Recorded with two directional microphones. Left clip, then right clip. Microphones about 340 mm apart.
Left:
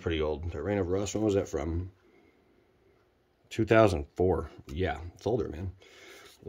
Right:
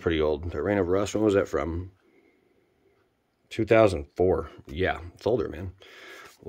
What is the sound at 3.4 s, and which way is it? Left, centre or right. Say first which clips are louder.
Speech: right 3 dB; centre.